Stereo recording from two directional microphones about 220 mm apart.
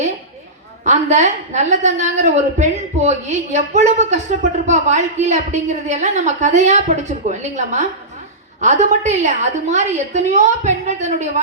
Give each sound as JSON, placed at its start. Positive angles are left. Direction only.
{"t": 0.9, "sound": "a woman's voice", "side_deg": -30}